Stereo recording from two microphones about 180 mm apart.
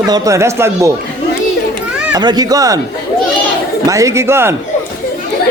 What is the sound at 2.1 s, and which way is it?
Speech, 20° right (ahead or behind).